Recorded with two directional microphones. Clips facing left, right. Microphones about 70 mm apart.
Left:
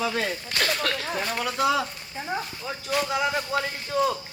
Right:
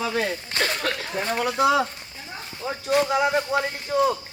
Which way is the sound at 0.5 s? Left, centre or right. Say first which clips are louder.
Even; right.